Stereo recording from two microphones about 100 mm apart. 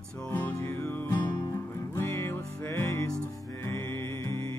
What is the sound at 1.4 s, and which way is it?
Music, 35° left (ahead or behind).